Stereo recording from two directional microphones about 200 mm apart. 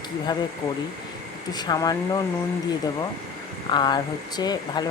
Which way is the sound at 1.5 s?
20° left (ahead or behind).